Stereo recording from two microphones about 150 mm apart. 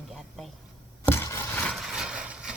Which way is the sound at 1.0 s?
15° left (ahead or behind).